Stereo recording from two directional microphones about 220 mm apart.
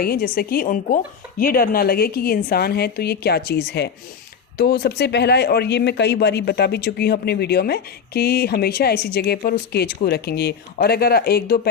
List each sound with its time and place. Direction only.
0.0 s speech: 40° left (ahead or behind)